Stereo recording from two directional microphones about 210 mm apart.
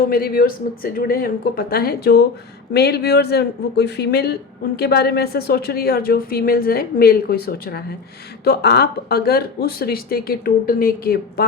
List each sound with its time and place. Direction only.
0.0 s a woman's voice: 45° left (ahead or behind)